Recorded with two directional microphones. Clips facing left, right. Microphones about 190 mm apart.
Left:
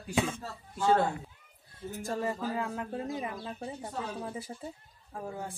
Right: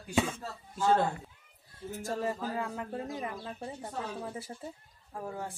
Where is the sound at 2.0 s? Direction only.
Centre (ahead or behind).